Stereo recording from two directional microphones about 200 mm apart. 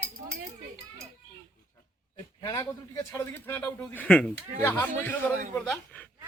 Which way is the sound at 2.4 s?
15° left (ahead or behind).